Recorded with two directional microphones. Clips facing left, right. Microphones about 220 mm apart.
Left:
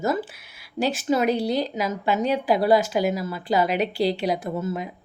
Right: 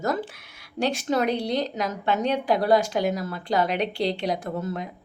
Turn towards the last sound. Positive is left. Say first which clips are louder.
# left 2 dB
turn(degrees=5)  # may be behind; listen again after turning